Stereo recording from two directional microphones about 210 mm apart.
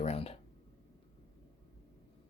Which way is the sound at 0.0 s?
30° left (ahead or behind).